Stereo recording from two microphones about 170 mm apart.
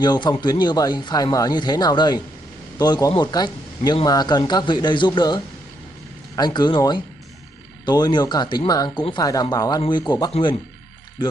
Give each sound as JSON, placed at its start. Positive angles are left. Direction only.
{"t": 0.0, "sound": "speech", "side_deg": 25}